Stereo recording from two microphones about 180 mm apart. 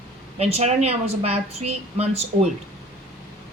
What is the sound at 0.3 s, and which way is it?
A woman's voice, 35° right (ahead or behind).